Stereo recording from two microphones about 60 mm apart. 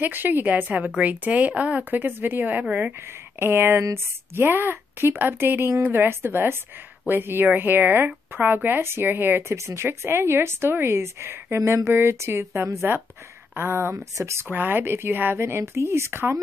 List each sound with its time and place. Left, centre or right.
0.0 s a woman's voice: right
3.3 s a woman's voice: right
9.6 s speech: right
13.6 s a woman's voice: right
13.9 s speech: right
14.5 s a woman's voice: right
15.3 s speech: right